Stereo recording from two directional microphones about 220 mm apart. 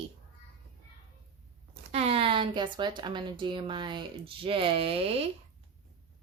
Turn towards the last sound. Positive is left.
turn(degrees=-25)  # may be behind; listen again after turning